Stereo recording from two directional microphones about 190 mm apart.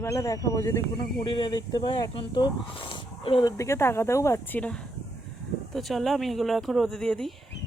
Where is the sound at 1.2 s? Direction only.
25° left (ahead or behind).